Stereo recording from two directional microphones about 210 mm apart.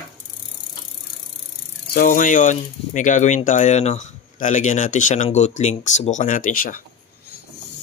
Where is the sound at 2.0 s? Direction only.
40° left (ahead or behind).